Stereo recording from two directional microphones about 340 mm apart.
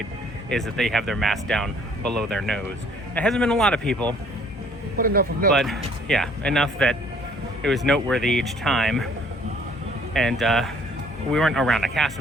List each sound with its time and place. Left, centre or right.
0.5 s speech: centre
3.2 s speech: centre
4.9 s speech: right
5.5 s speech: centre
10.2 s speech: centre